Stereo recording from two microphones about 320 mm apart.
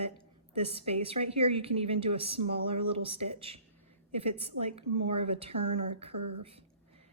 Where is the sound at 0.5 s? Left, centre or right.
Centre.